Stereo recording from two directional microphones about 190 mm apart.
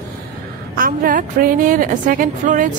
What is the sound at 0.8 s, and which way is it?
A woman's voice, 45° right (ahead or behind).